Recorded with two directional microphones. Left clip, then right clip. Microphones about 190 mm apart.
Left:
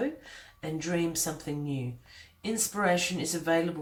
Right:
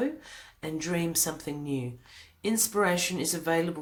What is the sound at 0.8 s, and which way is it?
Speech, 45° right (ahead or behind).